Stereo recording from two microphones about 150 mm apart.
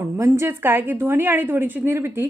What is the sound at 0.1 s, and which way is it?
A woman's voice, 20° right (ahead or behind).